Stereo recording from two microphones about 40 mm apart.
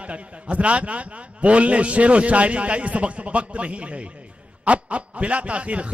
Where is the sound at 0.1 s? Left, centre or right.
Right.